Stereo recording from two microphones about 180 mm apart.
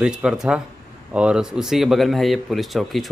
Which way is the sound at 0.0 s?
5° right (ahead or behind).